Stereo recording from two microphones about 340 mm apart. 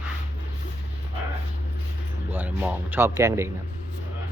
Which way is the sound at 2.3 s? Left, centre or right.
Centre.